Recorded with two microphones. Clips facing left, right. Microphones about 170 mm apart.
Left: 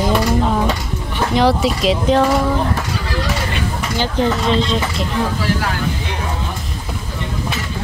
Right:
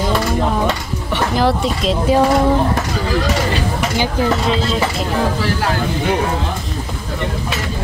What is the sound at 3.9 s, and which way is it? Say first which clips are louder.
Speech: left 1 dB; 5° right (ahead or behind).